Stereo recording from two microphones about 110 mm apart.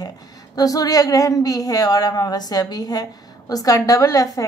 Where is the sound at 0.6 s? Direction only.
35° left (ahead or behind).